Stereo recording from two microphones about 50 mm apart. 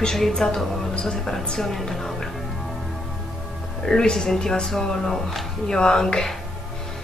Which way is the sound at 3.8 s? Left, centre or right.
Centre.